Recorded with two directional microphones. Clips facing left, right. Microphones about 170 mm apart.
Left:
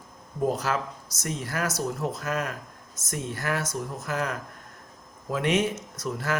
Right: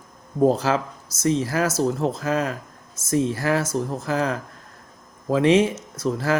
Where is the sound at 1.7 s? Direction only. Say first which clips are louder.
Right 7 dB; 25° right (ahead or behind).